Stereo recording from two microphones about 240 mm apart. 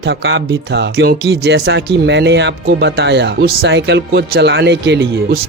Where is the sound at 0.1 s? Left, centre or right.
Right.